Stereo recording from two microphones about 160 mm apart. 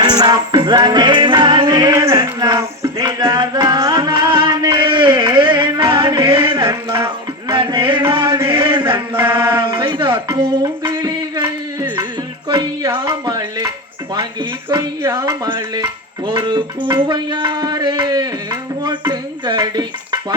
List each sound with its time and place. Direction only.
0.0 s music: 25° right (ahead or behind)
7.5 s music: 30° right (ahead or behind)
8.4 s mantra: 35° right (ahead or behind)
8.8 s chant: 15° right (ahead or behind)
9.6 s music: 30° right (ahead or behind)
12.5 s a sound: 25° right (ahead or behind)
14.7 s music: 20° right (ahead or behind)
18.8 s stir: 25° right (ahead or behind)